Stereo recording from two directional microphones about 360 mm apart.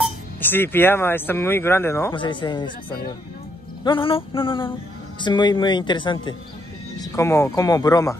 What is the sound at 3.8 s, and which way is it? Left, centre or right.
Speech, centre.